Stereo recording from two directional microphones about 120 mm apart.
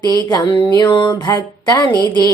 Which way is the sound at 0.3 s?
40° left (ahead or behind).